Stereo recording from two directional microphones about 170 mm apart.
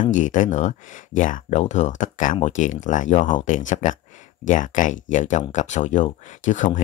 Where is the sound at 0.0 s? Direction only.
50° left (ahead or behind).